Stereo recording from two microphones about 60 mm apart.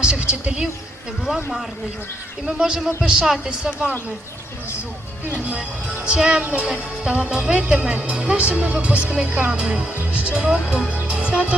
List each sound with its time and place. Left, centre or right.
0.0 s a woman's voice: centre
2.5 s speech: centre
6.1 s speech: centre
6.4 s speech: right
6.7 s speech: centre
11.1 s music: centre